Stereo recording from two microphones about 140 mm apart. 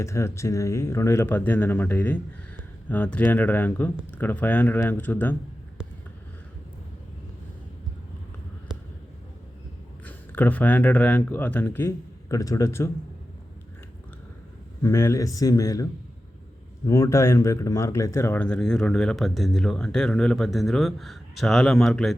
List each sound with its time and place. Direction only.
0.0 s speech: 20° left (ahead or behind)
10.1 s speech: 15° left (ahead or behind)
14.8 s speech: 20° left (ahead or behind)
18.4 s speech: 5° left (ahead or behind)